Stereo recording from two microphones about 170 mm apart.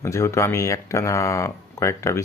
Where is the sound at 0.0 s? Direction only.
15° left (ahead or behind).